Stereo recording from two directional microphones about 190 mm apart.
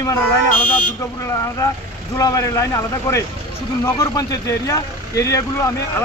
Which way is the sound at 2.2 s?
15° left (ahead or behind).